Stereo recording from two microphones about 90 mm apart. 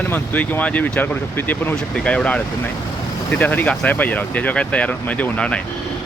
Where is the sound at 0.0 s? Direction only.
20° left (ahead or behind).